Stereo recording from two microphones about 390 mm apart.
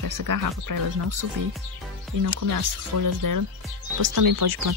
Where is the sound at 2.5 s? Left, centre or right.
Right.